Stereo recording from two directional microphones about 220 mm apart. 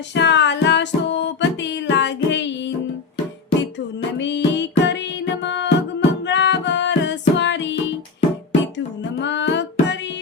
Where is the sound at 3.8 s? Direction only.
55° left (ahead or behind).